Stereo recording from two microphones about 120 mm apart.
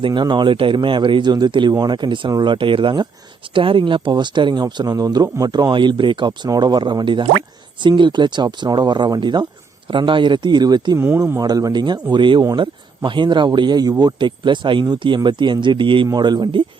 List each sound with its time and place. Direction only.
0.0 s speech: 40° right (ahead or behind)
10.9 s speech: 20° right (ahead or behind)
11.3 s speech: 30° right (ahead or behind)